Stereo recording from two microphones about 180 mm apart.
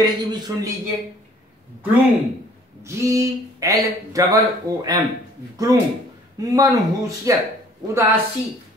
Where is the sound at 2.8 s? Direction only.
15° right (ahead or behind).